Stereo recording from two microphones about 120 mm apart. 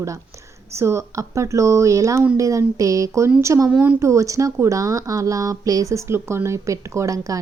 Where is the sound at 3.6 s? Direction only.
10° right (ahead or behind).